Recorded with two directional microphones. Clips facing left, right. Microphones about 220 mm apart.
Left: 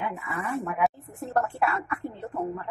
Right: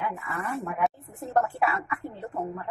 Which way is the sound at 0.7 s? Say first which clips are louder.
Left 1 dB; centre (ahead or behind).